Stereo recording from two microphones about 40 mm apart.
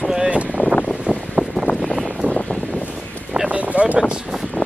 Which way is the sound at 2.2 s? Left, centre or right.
Right.